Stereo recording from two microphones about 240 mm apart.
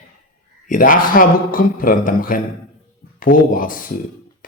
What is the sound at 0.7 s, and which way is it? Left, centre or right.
A man's voice, left.